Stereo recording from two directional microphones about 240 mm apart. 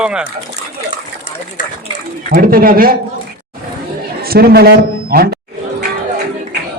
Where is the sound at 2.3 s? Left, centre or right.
Right.